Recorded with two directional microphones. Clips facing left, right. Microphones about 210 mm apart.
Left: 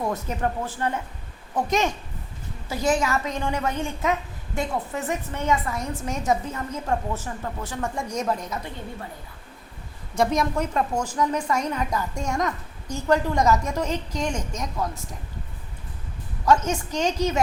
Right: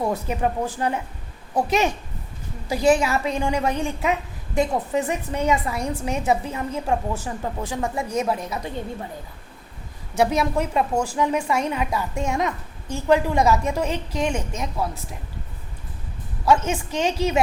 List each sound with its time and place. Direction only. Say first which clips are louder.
0.0 s a woman's voice: right 3 dB; 10° right (ahead or behind)
10.2 s a woman's voice: right 2 dB; 10° right (ahead or behind)
16.5 s a woman's voice: right 1 dB; 5° right (ahead or behind)